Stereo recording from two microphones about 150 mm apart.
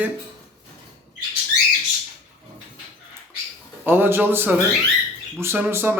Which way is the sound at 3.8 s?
15° right (ahead or behind).